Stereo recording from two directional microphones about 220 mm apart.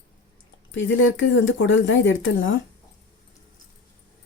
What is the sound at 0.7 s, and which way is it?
Speech, 60° left (ahead or behind).